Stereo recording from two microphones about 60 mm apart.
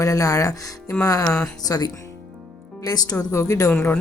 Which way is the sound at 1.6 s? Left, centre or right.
Left.